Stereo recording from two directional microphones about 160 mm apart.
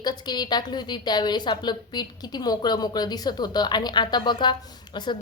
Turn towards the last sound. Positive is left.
turn(degrees=25)  # may be behind; listen again after turning